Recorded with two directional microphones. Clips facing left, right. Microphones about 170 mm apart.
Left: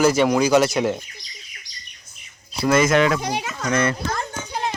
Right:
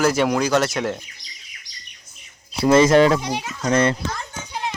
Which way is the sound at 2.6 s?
30° right (ahead or behind).